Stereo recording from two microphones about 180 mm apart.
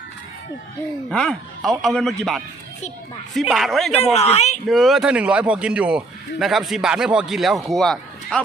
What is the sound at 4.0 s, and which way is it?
Speech, 35° left (ahead or behind).